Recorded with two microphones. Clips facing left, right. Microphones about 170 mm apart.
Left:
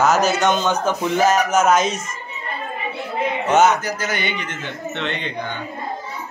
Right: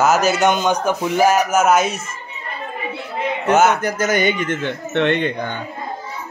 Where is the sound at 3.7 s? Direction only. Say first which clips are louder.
Right 4 dB; 55° right (ahead or behind).